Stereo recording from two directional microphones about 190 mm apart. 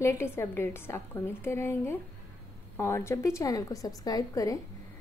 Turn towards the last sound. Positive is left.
turn(degrees=20)  # may be behind; listen again after turning